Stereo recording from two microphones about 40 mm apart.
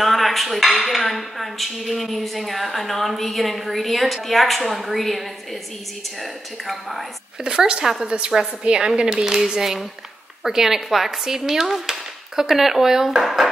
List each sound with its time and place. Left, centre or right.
0.0 s dishes: centre
0.7 s speech: centre
7.4 s a woman's voice: centre